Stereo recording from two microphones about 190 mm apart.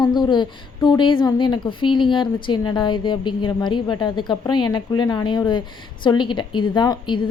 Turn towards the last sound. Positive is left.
turn(degrees=25)  # may be behind; listen again after turning